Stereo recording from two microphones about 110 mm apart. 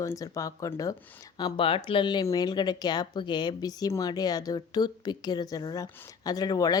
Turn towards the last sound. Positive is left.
turn(degrees=35)  # may be behind; listen again after turning